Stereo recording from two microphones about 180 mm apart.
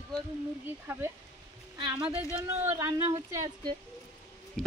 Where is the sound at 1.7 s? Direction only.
25° right (ahead or behind).